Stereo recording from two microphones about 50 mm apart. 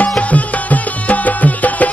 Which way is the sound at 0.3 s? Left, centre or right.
Left.